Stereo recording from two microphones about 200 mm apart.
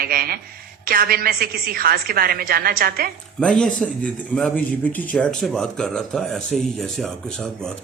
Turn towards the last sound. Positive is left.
turn(degrees=0)  # may be behind; listen again after turning